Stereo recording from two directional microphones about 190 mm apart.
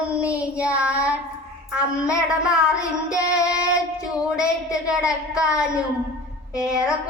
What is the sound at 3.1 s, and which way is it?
Female singing, 5° right (ahead or behind).